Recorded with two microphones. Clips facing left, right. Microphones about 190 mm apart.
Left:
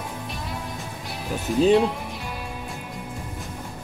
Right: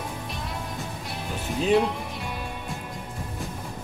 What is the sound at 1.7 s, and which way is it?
Speech, centre (ahead or behind).